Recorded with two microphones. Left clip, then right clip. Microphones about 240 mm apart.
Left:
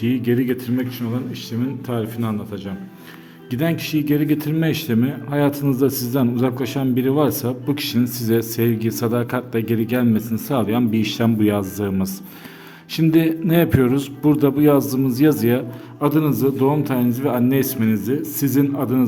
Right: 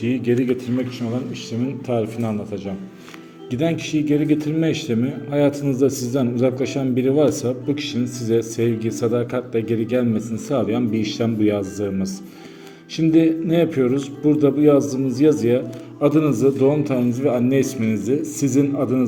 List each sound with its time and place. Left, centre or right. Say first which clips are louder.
0.0 s speech: even; left
1.9 s a man's voice: right 5 dB; centre
4.3 s a man's voice: right 1 dB; left